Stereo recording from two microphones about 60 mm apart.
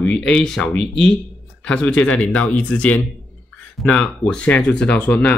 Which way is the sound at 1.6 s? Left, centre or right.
Left.